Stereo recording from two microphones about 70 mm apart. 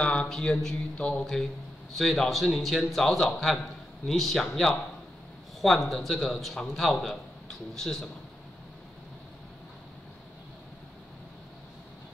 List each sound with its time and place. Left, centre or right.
0.0 s a sound: centre
1.2 s a man's voice: centre
5.9 s a man's voice: centre